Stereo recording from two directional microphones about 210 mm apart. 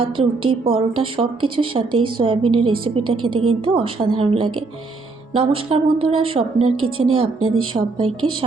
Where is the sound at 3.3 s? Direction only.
90° right.